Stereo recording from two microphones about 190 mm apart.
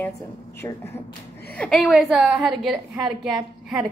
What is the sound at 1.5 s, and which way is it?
A woman's voice, centre (ahead or behind).